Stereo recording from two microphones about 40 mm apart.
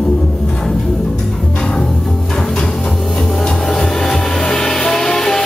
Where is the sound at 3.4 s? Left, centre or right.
Centre.